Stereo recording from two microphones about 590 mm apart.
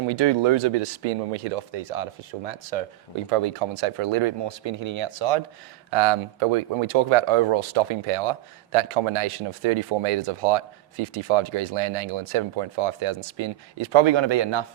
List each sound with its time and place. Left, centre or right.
0.1 s speech: right
3.2 s speech: right
5.9 s speech: right